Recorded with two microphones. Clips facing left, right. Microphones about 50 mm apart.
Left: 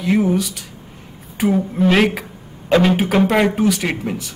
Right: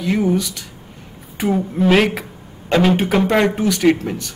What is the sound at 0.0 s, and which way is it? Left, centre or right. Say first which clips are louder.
A man's voice: left 1 dB; centre.